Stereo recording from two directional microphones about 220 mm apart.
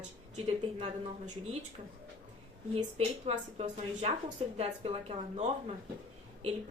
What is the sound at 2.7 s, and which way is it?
A woman's voice, 25° right (ahead or behind).